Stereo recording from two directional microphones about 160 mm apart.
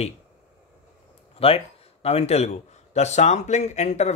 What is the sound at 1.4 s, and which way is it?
A man's voice, 35° left (ahead or behind).